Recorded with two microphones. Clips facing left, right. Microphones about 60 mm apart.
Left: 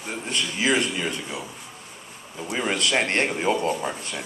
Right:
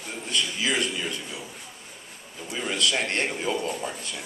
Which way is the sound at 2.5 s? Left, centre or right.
Left.